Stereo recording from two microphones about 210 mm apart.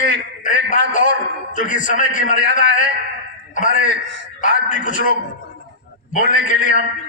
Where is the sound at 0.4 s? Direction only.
35° left (ahead or behind).